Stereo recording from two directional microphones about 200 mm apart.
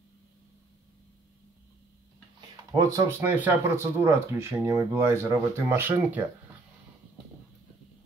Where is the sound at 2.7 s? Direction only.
15° right (ahead or behind).